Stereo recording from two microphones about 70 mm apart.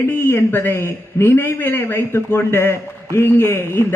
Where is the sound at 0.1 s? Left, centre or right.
Left.